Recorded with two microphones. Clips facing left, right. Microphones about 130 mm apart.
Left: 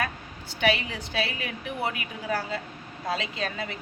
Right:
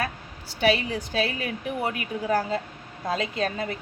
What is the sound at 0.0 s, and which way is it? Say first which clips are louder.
A woman's voice: right 1 dB; 35° right (ahead or behind).